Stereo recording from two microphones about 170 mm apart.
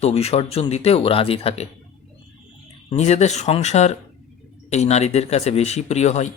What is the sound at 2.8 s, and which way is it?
Speech, 40° left (ahead or behind).